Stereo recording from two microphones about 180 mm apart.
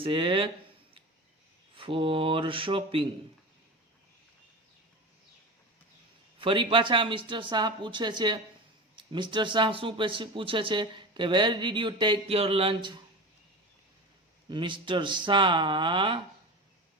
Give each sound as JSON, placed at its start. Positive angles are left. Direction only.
{"t": 0.0, "sound": "speech", "side_deg": -30}
{"t": 1.7, "sound": "speech", "side_deg": -30}
{"t": 6.4, "sound": "speech", "side_deg": -30}
{"t": 14.5, "sound": "speech", "side_deg": -25}